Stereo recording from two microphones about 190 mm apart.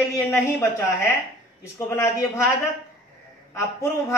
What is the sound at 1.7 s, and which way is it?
Speech, 15° left (ahead or behind).